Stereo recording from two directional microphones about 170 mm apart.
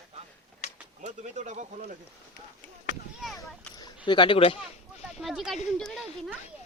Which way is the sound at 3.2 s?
Centre (ahead or behind).